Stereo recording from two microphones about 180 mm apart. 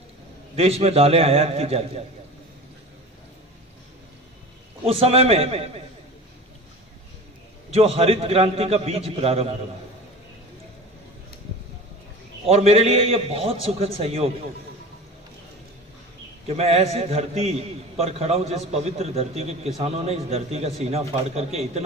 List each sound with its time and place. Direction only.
0.6 s a man's voice: 35° right (ahead or behind)
4.8 s a man's voice: 35° right (ahead or behind)
7.7 s a man's voice: 35° right (ahead or behind)
12.4 s a man's voice: 35° right (ahead or behind)
16.4 s a man's voice: 35° right (ahead or behind)